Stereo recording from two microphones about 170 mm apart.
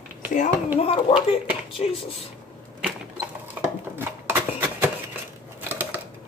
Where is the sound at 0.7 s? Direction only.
35° left (ahead or behind).